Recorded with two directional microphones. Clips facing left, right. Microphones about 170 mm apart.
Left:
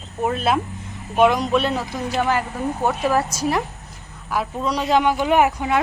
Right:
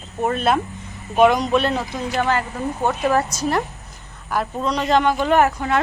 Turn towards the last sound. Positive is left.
turn(degrees=10)  # may be behind; listen again after turning